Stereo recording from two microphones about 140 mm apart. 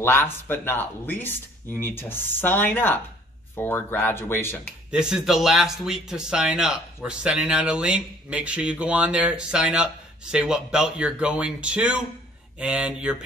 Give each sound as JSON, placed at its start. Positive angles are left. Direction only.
{"t": 0.0, "sound": "speech", "side_deg": 15}
{"t": 4.9, "sound": "speech", "side_deg": -5}